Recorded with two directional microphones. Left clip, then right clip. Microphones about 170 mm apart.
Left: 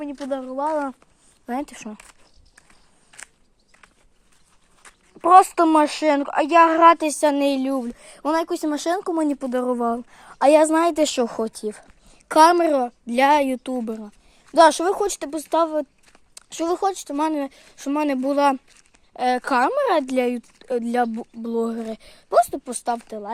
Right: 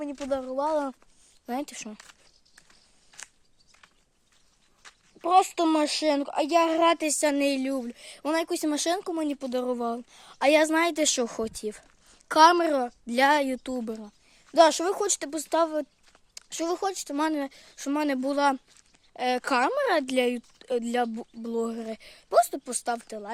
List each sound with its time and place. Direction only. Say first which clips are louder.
0.4 s speech: left 5 dB; 15° right (ahead or behind)
3.1 s a sound: left 4 dB; 35° left (ahead or behind)
4.8 s a sound: left 2 dB; 60° left (ahead or behind)
5.2 s a woman's voice: left 9 dB; centre (ahead or behind); by 9.0 s 15° right (ahead or behind)
9.3 s a woman's voice: left 6 dB; 5° left (ahead or behind); by 12.1 s 10° right (ahead or behind)
12.3 s a woman's voice: left 4 dB; centre (ahead or behind)